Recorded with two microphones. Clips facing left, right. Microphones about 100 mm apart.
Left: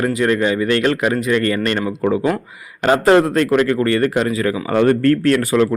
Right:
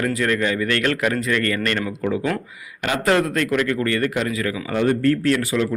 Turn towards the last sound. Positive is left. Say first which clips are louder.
# left 5 dB
turn(degrees=50)  # may be behind; listen again after turning